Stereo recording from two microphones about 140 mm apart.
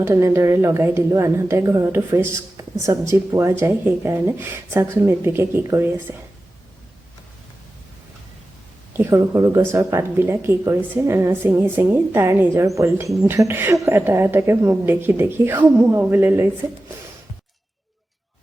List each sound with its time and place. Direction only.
0.0 s a woman's voice: 20° right (ahead or behind)
8.9 s a woman's voice: 20° right (ahead or behind)